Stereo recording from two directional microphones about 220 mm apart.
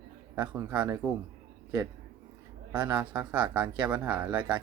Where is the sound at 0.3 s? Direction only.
20° right (ahead or behind).